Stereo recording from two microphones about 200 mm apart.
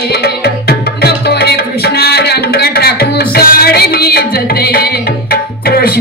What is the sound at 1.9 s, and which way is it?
Music, 55° left (ahead or behind).